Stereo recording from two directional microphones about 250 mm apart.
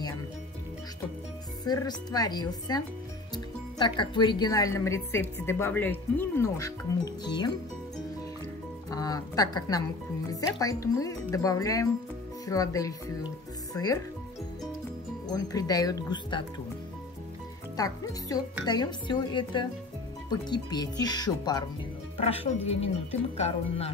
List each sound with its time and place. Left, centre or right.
1.6 s speech: centre
8.9 s speech: centre
15.2 s speech: centre
17.7 s speech: centre